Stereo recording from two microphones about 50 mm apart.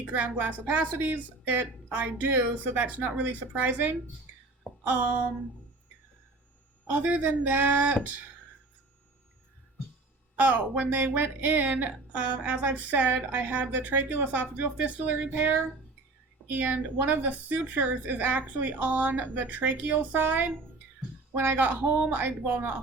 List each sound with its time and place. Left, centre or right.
0.1 s a woman's voice: right
4.8 s a sound: right
6.8 s a woman's voice: right
10.3 s a woman's voice: right